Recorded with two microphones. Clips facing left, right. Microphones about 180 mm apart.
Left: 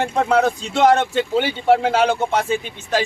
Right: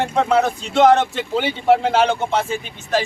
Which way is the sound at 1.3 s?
Centre (ahead or behind).